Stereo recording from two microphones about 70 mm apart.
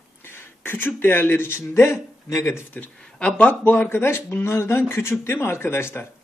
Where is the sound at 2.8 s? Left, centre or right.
Centre.